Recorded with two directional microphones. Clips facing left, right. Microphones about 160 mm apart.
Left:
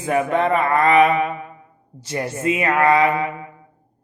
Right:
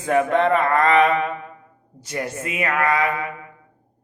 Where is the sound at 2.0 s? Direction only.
30° left (ahead or behind).